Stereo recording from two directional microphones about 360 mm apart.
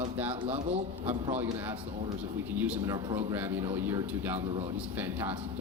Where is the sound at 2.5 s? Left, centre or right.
Centre.